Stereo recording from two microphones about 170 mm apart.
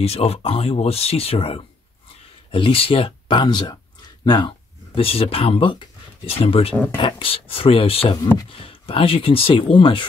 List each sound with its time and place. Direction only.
0.0 s speech: 35° left (ahead or behind)